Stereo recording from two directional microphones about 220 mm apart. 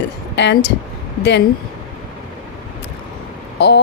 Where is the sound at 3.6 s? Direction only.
50° left (ahead or behind).